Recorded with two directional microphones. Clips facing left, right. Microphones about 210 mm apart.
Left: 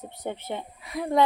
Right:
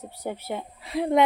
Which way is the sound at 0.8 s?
30° right (ahead or behind).